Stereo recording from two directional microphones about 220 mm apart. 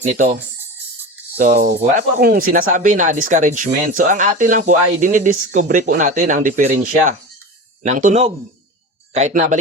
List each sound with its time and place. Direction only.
1.4 s speech: 35° right (ahead or behind)